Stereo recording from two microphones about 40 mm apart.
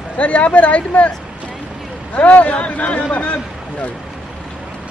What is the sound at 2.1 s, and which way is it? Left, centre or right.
Speech, left.